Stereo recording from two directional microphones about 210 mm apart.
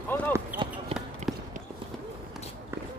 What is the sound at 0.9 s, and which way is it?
Run, 30° right (ahead or behind).